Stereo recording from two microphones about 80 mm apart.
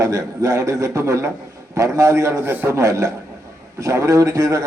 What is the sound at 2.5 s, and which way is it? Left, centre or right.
Speech, right.